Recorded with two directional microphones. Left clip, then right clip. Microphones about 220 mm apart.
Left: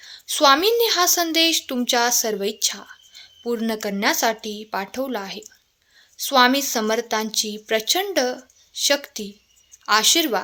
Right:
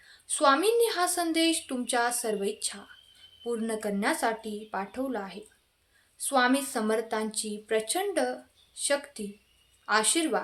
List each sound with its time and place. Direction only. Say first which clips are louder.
0.0 s a woman's voice: left 7 dB; 40° left (ahead or behind)